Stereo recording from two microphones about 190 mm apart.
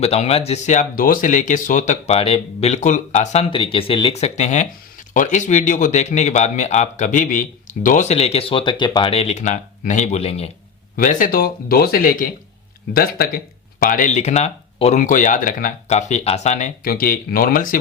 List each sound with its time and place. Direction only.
0.0 s speech: 35° left (ahead or behind)
10.9 s speech: 45° left (ahead or behind)